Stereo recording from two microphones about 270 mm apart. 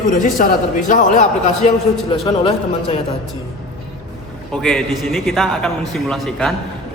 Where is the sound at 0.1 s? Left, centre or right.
Left.